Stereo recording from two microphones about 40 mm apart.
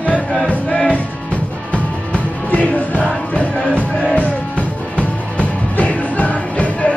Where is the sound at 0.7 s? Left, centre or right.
Centre.